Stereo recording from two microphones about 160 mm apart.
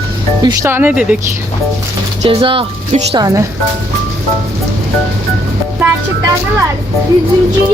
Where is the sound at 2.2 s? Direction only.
35° right (ahead or behind).